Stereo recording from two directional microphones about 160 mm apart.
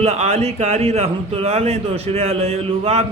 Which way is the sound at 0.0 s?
40° right (ahead or behind).